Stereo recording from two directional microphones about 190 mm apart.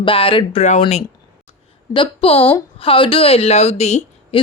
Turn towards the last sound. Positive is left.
turn(degrees=35)  # may be behind; listen again after turning